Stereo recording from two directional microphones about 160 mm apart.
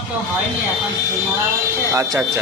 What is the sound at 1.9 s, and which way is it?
Speech, 20° right (ahead or behind).